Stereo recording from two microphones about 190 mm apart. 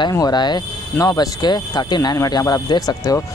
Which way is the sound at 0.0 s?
20° left (ahead or behind).